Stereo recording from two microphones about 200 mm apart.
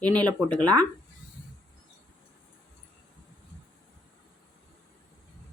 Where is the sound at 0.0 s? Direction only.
5° left (ahead or behind).